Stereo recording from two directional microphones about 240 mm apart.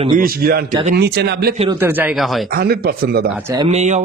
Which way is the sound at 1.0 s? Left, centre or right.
Right.